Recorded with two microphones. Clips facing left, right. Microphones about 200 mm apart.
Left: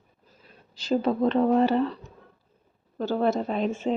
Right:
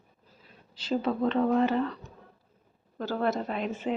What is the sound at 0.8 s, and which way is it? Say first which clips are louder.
Speech: left 4 dB; 40° left (ahead or behind).